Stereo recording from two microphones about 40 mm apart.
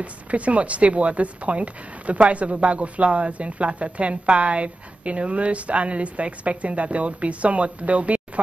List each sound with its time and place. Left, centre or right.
0.0 s speech: right